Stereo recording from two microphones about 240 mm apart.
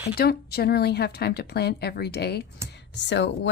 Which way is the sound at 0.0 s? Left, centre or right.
Left.